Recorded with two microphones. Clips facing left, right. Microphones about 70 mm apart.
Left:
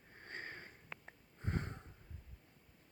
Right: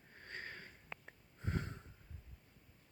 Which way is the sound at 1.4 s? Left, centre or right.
Left.